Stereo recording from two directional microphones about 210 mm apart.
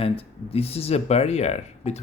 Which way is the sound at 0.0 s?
30° left (ahead or behind).